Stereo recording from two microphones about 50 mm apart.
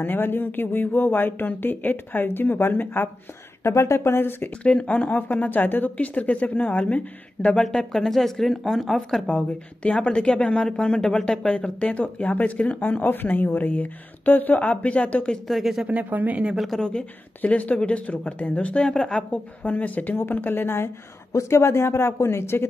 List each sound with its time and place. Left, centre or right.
0.0 s speech: left
3.6 s speech: left
4.8 s speech: left
7.6 s speech: centre
9.3 s speech: left
13.0 s speech: left
15.4 s speech: centre
15.9 s speech: right
16.5 s speech: centre
17.4 s speech: left
18.8 s speech: centre
19.3 s speech: left
21.3 s speech: left